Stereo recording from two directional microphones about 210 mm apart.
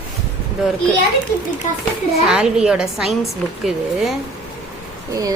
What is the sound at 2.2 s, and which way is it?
Speech, 5° right (ahead or behind).